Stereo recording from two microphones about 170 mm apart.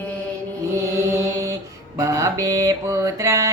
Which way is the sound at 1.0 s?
20° right (ahead or behind).